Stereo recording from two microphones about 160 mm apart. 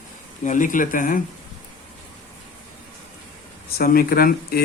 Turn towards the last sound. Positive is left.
turn(degrees=70)  # may be behind; listen again after turning